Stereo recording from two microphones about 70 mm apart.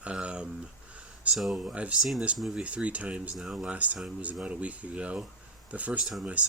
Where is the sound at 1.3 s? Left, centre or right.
Centre.